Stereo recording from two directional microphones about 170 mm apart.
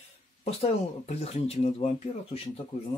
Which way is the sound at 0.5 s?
35° left (ahead or behind).